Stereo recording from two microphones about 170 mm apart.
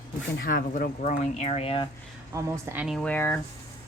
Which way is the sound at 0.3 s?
60° left (ahead or behind).